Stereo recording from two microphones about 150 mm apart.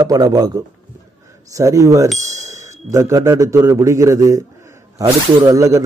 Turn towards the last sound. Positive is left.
turn(degrees=-20)  # may be behind; listen again after turning